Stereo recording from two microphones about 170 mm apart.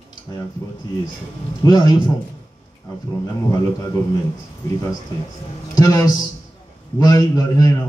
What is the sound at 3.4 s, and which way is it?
Speech, 20° left (ahead or behind).